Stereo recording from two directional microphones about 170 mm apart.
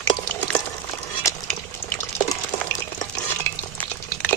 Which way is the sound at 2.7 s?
20° left (ahead or behind).